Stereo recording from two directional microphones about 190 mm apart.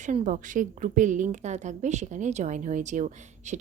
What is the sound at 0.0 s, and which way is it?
A woman's voice, 40° right (ahead or behind).